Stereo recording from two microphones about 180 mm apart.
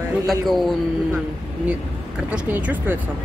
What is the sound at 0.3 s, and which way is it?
Speech, centre (ahead or behind).